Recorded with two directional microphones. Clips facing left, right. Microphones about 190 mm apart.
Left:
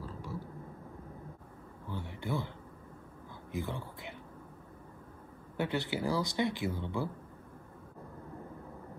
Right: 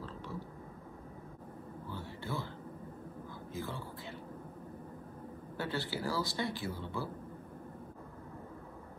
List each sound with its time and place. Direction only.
0.0 s vehicle: 10° left (ahead or behind)
1.9 s a sound: 20° left (ahead or behind)
3.5 s speech: 20° left (ahead or behind)
5.6 s speech: 20° left (ahead or behind)